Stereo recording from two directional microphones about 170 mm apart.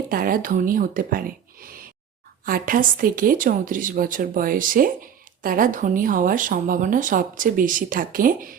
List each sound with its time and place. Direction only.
0.1 s speech: 55° right (ahead or behind)